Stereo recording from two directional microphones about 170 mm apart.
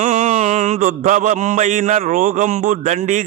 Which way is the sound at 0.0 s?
50° right (ahead or behind).